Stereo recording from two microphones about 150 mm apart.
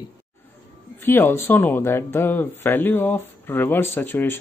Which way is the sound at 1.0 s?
15° left (ahead or behind).